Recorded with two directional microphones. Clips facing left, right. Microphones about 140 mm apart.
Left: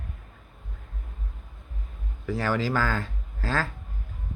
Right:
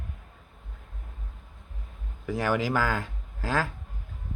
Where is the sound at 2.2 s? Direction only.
15° right (ahead or behind).